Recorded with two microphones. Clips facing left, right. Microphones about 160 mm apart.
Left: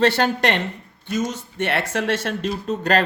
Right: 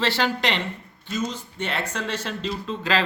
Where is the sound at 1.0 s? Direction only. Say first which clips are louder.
Left 4 dB; 75° left (ahead or behind).